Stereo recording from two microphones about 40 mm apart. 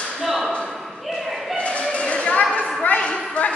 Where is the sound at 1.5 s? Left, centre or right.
Left.